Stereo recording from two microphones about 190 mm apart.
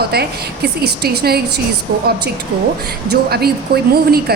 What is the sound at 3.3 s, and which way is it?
A woman's voice, 55° right (ahead or behind).